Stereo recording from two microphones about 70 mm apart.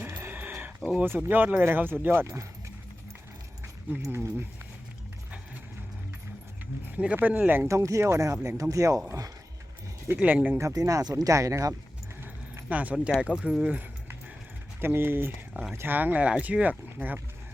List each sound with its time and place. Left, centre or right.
0.0 s a sound: right
1.0 s speech: right
4.1 s speech: right
6.9 s speech: centre
7.7 s speech: right
10.2 s speech: right
10.6 s speech: right
12.2 s a sound: right
13.1 s speech: centre
14.8 s speech: right